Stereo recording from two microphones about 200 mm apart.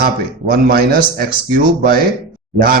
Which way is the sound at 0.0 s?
50° right (ahead or behind).